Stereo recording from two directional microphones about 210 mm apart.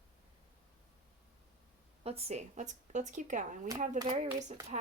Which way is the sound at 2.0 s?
30° right (ahead or behind).